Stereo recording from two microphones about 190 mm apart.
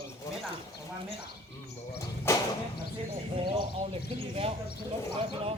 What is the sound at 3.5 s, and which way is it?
Speech, 30° right (ahead or behind).